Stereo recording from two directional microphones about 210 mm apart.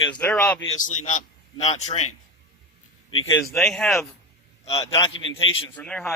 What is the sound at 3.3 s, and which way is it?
Speech, 15° left (ahead or behind).